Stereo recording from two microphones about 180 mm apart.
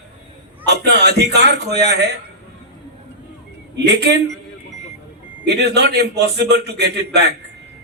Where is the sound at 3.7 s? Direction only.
65° right (ahead or behind).